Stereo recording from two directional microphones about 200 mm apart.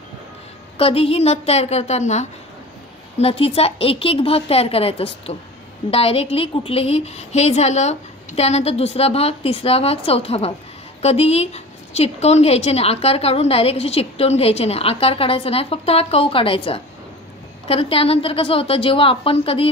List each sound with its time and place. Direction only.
0.7 s a woman's voice: 30° left (ahead or behind)